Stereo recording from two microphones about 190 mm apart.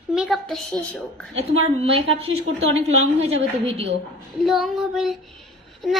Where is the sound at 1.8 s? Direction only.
30° right (ahead or behind).